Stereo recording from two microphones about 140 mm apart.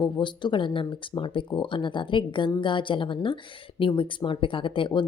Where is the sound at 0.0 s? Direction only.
35° left (ahead or behind).